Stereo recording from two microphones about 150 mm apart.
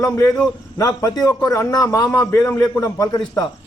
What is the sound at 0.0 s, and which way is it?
A man's voice, 20° left (ahead or behind).